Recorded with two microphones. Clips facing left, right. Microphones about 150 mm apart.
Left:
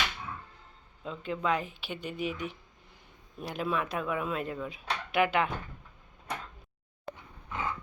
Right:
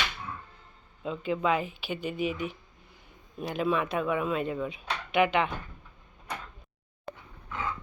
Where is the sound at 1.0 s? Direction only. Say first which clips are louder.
Right 4 dB; 5° right (ahead or behind).